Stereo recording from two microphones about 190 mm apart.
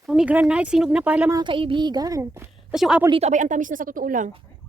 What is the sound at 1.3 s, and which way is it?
A child's voice, 25° right (ahead or behind).